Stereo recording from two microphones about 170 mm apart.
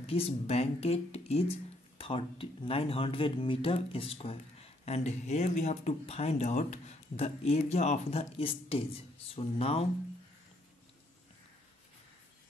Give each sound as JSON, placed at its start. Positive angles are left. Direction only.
{"t": 0.0, "sound": "speech", "side_deg": 35}